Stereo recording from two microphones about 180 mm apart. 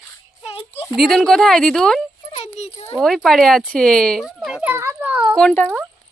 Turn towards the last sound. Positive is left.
turn(degrees=5)  # may be behind; listen again after turning